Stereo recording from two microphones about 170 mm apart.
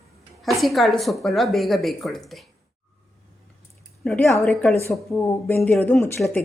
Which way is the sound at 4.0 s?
5° left (ahead or behind).